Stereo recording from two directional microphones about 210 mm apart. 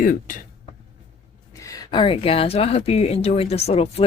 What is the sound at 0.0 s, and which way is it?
Speech, 40° left (ahead or behind).